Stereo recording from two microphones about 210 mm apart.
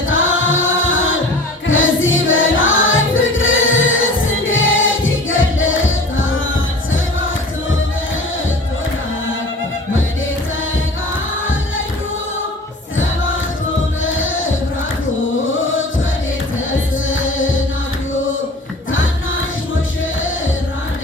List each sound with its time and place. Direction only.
0.1 s choir: 70° left (ahead or behind)
1.6 s music: 70° left (ahead or behind)
14.0 s music: 70° left (ahead or behind)
15.5 s music: 70° left (ahead or behind)
17.1 s music: 70° left (ahead or behind)